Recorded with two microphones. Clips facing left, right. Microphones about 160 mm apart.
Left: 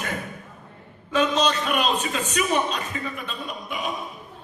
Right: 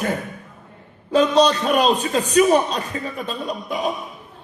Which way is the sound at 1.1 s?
35° right (ahead or behind).